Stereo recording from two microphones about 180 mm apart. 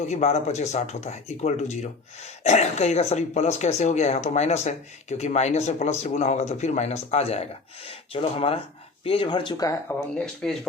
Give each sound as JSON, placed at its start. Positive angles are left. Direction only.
{"t": 0.0, "sound": "speech", "side_deg": 40}
{"t": 10.2, "sound": "speech", "side_deg": 5}